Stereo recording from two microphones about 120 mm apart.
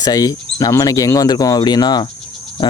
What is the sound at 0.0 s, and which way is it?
Speech, 30° left (ahead or behind).